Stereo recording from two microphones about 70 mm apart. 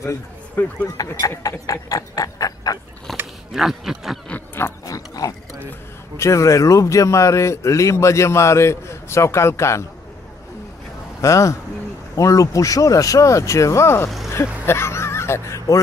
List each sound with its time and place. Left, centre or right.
0.6 s speech: left
1.0 s speech: left
1.4 s a sound: left
3.1 s a sound: centre
3.5 s speech: centre
4.8 s wild animals: left
6.1 s a man's voice: left
11.1 s a man's voice: left